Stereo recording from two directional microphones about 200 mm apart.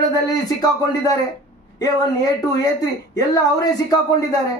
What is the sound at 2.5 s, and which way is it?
A woman's voice, 20° left (ahead or behind).